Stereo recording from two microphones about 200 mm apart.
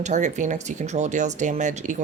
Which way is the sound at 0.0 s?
35° right (ahead or behind).